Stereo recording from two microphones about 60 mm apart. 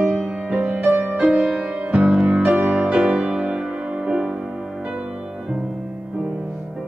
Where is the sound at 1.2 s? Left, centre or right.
Centre.